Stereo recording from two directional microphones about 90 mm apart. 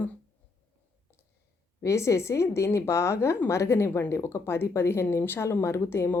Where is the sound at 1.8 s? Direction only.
35° left (ahead or behind).